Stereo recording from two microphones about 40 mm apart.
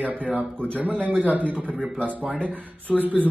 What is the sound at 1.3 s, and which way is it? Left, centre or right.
Speech, right.